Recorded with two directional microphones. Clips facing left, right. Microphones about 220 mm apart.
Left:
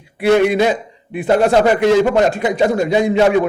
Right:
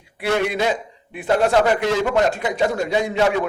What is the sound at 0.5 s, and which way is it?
A man's voice, 15° left (ahead or behind).